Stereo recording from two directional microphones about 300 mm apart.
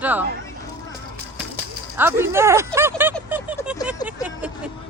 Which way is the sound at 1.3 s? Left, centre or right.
Centre.